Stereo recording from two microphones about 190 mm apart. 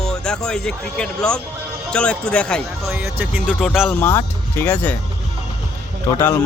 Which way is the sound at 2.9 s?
10° right (ahead or behind).